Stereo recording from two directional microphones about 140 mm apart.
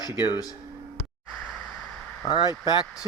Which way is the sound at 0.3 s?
25° left (ahead or behind).